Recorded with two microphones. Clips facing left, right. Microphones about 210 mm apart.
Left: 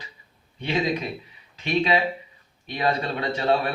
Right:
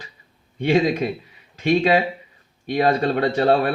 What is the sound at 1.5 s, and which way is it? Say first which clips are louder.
Speech: right 6 dB; 45° right (ahead or behind).